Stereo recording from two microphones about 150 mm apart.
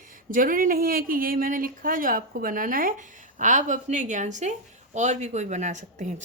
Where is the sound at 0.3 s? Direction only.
65° right (ahead or behind).